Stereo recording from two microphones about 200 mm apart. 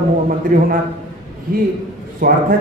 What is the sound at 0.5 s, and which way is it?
Speech, 45° right (ahead or behind).